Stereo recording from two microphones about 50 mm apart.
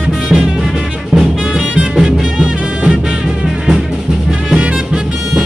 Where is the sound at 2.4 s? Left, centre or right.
Right.